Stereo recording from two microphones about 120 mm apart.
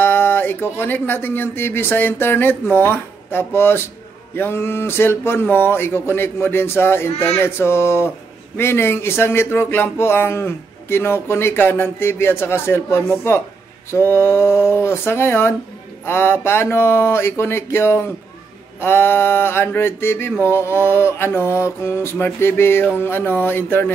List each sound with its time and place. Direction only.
0.0 s speech: 20° left (ahead or behind)